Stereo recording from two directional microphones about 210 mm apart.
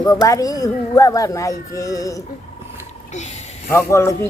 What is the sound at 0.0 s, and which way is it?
Speech, 15° left (ahead or behind).